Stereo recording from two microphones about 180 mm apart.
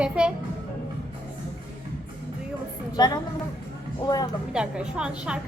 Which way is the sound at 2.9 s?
25° left (ahead or behind).